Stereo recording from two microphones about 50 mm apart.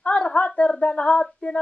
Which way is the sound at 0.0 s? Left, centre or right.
Left.